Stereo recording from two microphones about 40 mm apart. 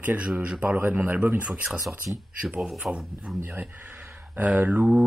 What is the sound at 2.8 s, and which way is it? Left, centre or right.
Speech, centre.